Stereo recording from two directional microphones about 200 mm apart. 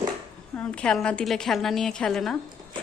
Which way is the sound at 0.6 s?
5° left (ahead or behind).